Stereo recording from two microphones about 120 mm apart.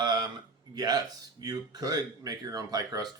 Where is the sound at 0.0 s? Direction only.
40° right (ahead or behind).